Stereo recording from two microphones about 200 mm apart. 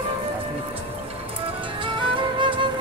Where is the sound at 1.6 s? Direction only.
25° right (ahead or behind).